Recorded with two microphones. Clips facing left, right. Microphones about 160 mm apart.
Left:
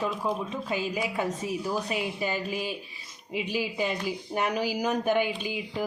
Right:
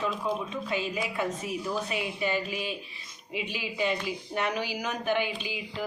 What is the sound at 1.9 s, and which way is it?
Speech, 40° left (ahead or behind).